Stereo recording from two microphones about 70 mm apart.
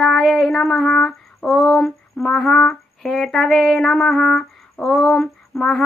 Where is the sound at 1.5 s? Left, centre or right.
Centre.